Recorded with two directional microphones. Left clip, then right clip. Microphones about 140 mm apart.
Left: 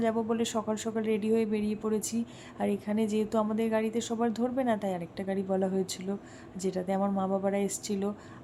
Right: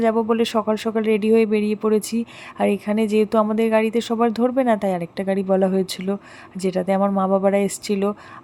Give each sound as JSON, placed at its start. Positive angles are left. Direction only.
{"t": 0.0, "sound": "speech", "side_deg": -30}